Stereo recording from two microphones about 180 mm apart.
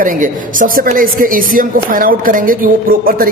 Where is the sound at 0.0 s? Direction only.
50° right (ahead or behind).